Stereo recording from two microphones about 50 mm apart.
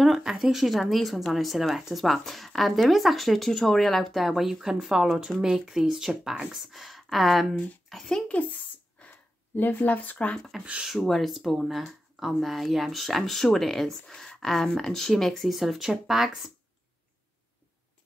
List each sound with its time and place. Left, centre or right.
0.0 s a child's voice: centre
8.3 s speech: left
9.1 s speech: left
10.6 s speech: right
10.9 s speech: centre